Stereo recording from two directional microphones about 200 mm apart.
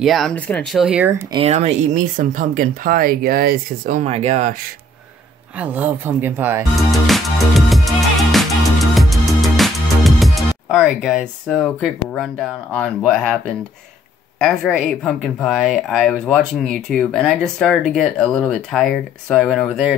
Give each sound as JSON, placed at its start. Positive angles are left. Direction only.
{"t": 0.0, "sound": "speech", "side_deg": 0}
{"t": 1.3, "sound": "speech", "side_deg": -30}
{"t": 5.6, "sound": "speech", "side_deg": -10}
{"t": 7.1, "sound": "music", "side_deg": 0}
{"t": 14.4, "sound": "speech", "side_deg": 0}